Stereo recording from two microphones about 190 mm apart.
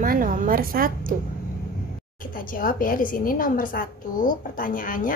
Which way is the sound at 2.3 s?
50° left (ahead or behind).